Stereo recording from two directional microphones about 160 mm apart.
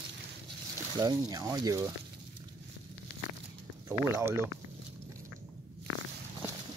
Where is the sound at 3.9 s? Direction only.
15° right (ahead or behind).